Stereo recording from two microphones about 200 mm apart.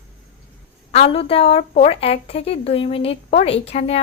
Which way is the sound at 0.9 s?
30° left (ahead or behind).